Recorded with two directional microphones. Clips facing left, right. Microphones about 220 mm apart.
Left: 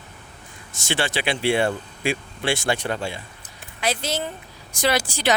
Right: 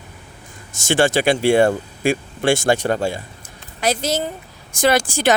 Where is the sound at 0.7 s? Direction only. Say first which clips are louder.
Right 9 dB; 45° right (ahead or behind).